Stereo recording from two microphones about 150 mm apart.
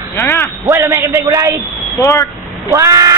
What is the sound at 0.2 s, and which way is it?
Speech, 20° left (ahead or behind).